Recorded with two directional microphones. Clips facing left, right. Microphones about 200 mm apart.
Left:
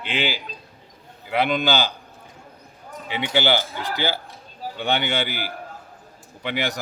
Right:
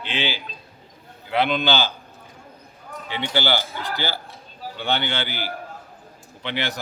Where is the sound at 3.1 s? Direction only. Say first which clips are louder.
Left 2 dB; 10° left (ahead or behind).